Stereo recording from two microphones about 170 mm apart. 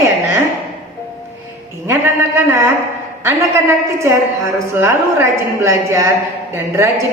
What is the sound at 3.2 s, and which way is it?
A woman's voice, 15° right (ahead or behind).